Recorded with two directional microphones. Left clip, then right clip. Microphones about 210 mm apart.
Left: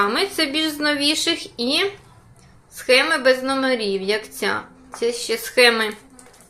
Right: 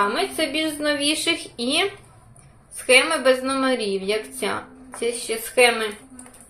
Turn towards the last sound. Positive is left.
turn(degrees=20)  # may be behind; listen again after turning